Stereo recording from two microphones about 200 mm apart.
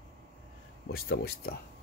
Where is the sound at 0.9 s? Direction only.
50° left (ahead or behind).